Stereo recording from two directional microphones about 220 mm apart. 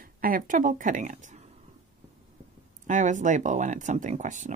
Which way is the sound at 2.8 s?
35° right (ahead or behind).